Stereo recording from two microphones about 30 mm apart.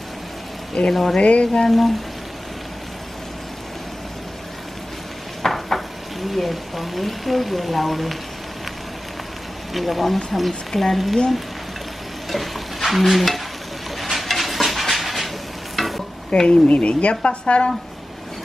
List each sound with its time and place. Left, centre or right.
0.8 s speech: left
1.2 s speech: left
1.7 s speech: centre
5.4 s stir: centre
6.3 s speech: centre
9.8 s speech: centre
12.3 s stir: centre
13.9 s a sound: centre
16.3 s speech: left
16.6 s speech: left